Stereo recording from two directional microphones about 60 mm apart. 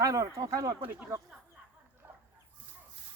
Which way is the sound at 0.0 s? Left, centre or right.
Right.